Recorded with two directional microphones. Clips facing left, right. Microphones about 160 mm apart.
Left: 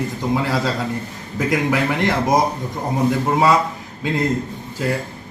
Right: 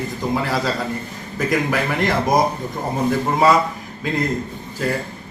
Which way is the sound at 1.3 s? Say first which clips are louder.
Left 1 dB; 20° left (ahead or behind).